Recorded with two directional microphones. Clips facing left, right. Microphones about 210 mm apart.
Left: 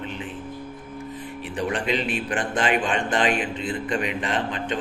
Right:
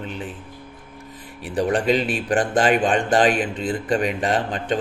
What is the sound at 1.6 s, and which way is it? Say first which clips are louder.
A man's voice: right 6 dB; 40° right (ahead or behind).